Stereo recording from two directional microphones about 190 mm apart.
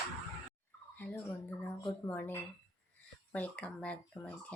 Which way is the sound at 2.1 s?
10° left (ahead or behind).